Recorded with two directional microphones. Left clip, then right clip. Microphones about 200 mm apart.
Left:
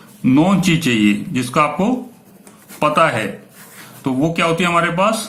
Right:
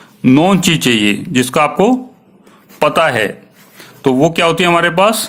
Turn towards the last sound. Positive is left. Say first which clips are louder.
# right 5 dB
turn(degrees=-50)  # may be behind; listen again after turning